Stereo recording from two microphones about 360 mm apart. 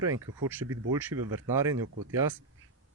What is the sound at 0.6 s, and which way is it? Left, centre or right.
Speech, right.